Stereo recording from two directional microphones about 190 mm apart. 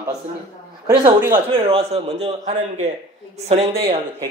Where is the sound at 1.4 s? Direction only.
30° right (ahead or behind).